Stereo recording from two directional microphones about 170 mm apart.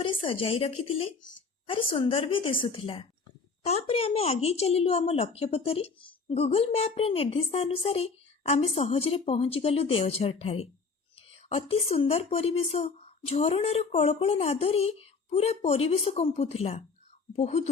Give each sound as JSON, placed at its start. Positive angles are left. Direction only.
{"t": 0.0, "sound": "a woman's voice", "side_deg": 30}